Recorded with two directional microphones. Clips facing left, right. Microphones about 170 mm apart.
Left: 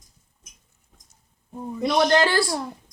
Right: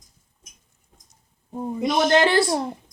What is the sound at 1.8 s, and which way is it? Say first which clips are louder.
Speech: right 1 dB; 20° right (ahead or behind).